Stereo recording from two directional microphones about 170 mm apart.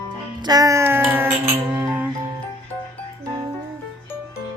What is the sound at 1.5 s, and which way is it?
Music, 10° right (ahead or behind).